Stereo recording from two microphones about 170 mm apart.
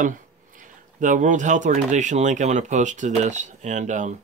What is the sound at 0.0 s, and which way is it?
Speech, 50° right (ahead or behind).